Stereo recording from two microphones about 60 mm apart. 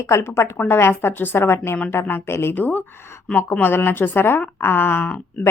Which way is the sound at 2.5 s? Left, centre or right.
Left.